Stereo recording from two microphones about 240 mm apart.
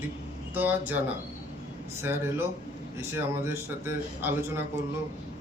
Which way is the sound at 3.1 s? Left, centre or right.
Centre.